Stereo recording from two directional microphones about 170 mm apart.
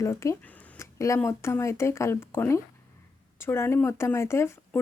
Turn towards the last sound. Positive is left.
turn(degrees=15)  # may be behind; listen again after turning